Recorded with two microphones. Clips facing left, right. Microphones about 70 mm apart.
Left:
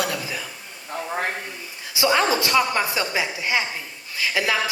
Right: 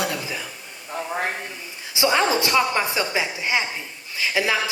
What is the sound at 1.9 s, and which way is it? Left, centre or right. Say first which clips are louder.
Speech: even; right.